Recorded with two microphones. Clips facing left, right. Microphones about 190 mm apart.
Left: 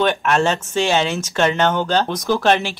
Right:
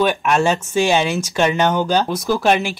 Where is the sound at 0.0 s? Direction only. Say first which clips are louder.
Right 1 dB; 10° right (ahead or behind).